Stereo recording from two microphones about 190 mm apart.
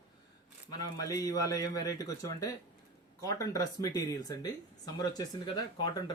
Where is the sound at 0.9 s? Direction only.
20° left (ahead or behind).